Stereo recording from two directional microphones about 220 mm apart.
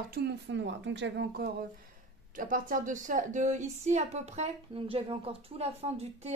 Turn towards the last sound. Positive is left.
turn(degrees=-30)  # may be behind; listen again after turning